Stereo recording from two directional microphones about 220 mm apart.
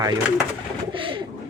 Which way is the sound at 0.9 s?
25° right (ahead or behind).